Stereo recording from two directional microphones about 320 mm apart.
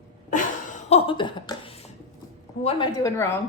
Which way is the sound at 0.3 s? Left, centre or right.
Left.